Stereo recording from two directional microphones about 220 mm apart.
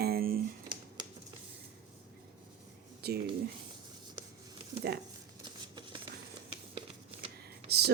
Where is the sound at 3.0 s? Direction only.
45° right (ahead or behind).